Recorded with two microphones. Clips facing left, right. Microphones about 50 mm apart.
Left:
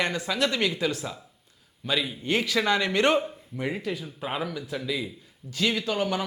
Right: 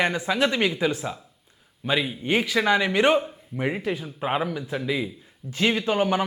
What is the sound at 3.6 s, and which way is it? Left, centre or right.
Speech, right.